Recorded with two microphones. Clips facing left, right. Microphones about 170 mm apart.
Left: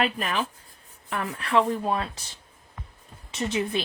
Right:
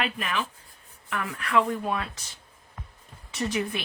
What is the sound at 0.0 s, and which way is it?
Speech, 35° left (ahead or behind).